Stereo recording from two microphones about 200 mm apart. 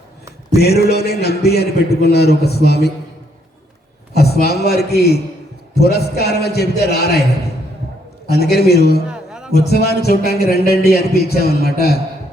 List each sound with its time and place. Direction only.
0.5 s speech: 55° left (ahead or behind)
4.1 s speech: 50° left (ahead or behind)
8.3 s speech: 55° left (ahead or behind)
9.0 s music: 5° right (ahead or behind)
9.5 s speech: 55° left (ahead or behind)